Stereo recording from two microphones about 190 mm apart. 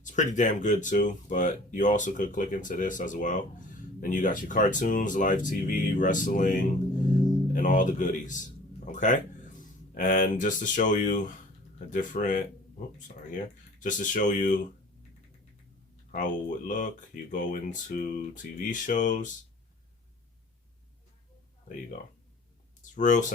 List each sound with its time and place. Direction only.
0.0 s a man's voice: 40° left (ahead or behind)
16.1 s speech: 45° left (ahead or behind)
22.8 s a sound: 40° left (ahead or behind)